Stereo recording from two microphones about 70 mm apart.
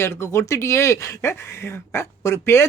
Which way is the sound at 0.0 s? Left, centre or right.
Left.